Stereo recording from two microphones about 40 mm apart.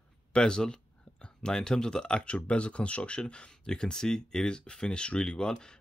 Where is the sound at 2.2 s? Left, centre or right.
Left.